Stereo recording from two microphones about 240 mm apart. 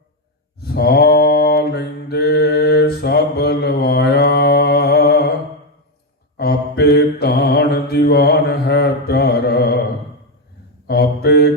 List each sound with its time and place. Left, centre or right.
0.6 s mantra: left
6.3 s mantra: left
10.8 s mantra: left